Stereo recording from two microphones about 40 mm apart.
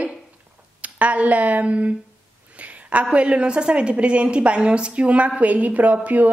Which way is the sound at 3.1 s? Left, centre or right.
Right.